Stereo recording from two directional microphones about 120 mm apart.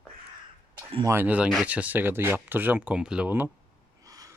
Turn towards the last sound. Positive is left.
turn(degrees=-30)  # may be behind; listen again after turning